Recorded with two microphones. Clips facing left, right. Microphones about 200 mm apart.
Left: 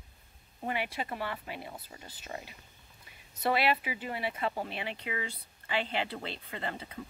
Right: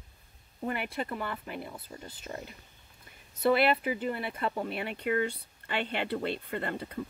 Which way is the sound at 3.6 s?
50° right (ahead or behind).